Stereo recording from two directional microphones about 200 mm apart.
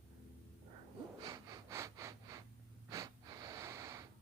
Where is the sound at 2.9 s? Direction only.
15° right (ahead or behind).